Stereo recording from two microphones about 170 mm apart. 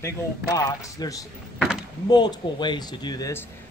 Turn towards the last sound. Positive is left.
turn(degrees=15)  # may be behind; listen again after turning